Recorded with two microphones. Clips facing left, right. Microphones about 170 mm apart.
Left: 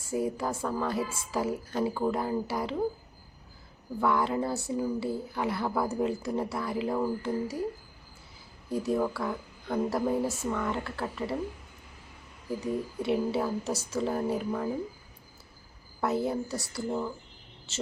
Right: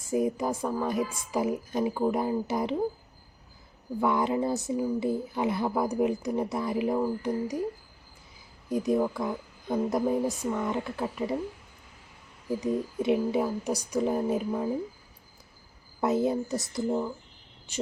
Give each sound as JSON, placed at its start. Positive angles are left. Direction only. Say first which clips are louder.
{"t": 0.0, "sound": "speech", "louder": "right 3 dB", "side_deg": -20}
{"t": 4.0, "sound": "speech", "louder": "right 1 dB", "side_deg": -20}
{"t": 8.7, "sound": "speech", "louder": "right 2 dB", "side_deg": -15}
{"t": 12.5, "sound": "speech", "louder": "right 3 dB", "side_deg": -20}
{"t": 16.0, "sound": "speech", "louder": "right 3 dB", "side_deg": -20}